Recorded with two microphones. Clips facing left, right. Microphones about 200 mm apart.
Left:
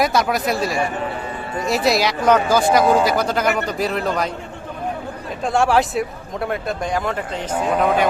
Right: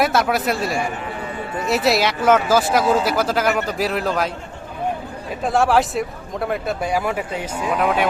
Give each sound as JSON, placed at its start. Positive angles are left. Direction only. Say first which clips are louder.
{"t": 0.0, "sound": "speech", "louder": "even", "side_deg": 0}
{"t": 5.4, "sound": "speech", "louder": "even", "side_deg": 0}